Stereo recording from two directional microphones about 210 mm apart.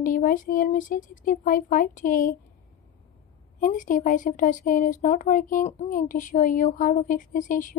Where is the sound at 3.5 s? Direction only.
40° left (ahead or behind).